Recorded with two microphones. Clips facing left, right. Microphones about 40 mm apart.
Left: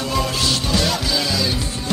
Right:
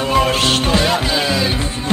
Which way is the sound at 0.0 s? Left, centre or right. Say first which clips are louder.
Right 6 dB; right.